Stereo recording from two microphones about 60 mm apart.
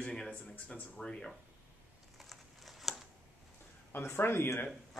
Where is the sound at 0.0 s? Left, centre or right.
Centre.